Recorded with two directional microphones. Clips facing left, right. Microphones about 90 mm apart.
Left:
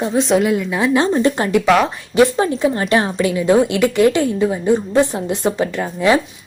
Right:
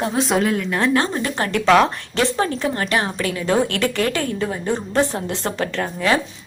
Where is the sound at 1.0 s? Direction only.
20° left (ahead or behind).